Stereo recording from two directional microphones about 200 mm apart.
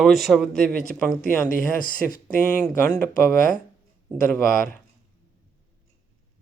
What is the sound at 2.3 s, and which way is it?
Speech, 10° left (ahead or behind).